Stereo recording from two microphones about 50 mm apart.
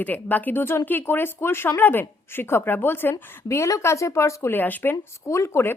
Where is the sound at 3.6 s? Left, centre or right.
Left.